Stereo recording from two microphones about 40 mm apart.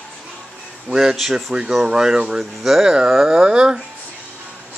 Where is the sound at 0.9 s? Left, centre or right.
Centre.